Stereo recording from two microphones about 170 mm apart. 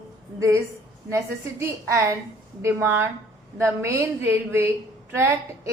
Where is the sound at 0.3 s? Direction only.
20° right (ahead or behind).